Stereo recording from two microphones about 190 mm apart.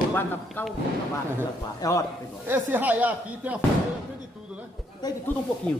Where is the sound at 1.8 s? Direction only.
15° left (ahead or behind).